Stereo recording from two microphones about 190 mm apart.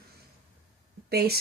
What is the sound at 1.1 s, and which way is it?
Speech, 55° right (ahead or behind).